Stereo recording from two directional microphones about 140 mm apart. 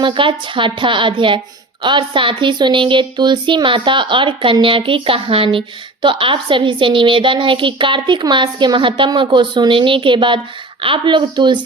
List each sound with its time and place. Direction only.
0.0 s speech: 35° right (ahead or behind)